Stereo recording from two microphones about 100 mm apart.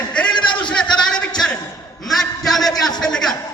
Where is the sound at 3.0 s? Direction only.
5° left (ahead or behind).